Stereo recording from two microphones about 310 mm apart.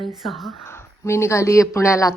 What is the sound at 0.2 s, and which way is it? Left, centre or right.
A woman's voice, centre.